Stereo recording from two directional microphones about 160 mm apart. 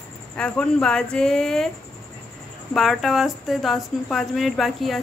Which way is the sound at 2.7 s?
Centre (ahead or behind).